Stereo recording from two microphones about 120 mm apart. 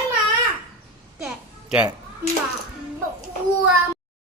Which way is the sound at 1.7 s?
10° right (ahead or behind).